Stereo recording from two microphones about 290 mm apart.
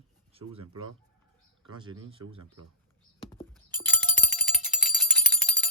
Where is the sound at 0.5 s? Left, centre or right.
Right.